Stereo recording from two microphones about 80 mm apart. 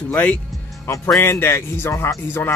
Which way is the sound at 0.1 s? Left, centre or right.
Centre.